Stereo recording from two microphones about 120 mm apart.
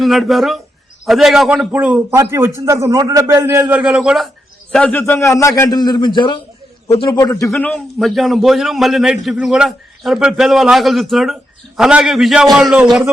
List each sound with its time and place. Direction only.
0.0 s a man's voice: centre (ahead or behind); by 3.8 s 20° right (ahead or behind)
3.8 s a man's voice: 5° right (ahead or behind)
4.7 s a man's voice: 10° left (ahead or behind)
5.3 s a man's voice: 25° left (ahead or behind); by 6.4 s 45° left (ahead or behind)
7.1 s a man's voice: 30° left (ahead or behind)
7.5 s a man's voice: centre (ahead or behind)